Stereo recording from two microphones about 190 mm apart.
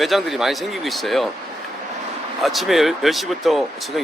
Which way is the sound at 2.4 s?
Centre (ahead or behind).